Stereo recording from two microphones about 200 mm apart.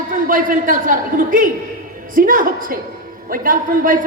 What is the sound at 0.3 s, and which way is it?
A man's voice, 45° right (ahead or behind).